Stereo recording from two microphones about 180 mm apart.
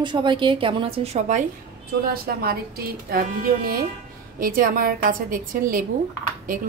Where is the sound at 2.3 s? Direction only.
60° right (ahead or behind).